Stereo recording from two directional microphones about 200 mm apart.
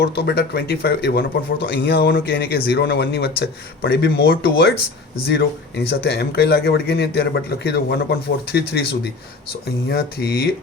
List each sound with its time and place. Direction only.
0.0 s speech: 55° left (ahead or behind)